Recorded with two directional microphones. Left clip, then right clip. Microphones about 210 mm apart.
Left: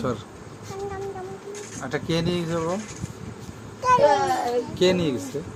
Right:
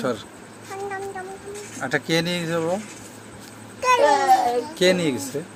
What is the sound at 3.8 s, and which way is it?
A child's voice, 10° left (ahead or behind).